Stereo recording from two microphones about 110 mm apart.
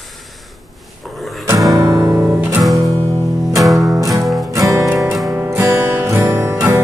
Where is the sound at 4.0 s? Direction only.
35° right (ahead or behind).